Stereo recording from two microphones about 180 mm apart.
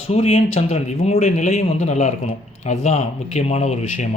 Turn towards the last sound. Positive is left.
turn(degrees=35)  # may be behind; listen again after turning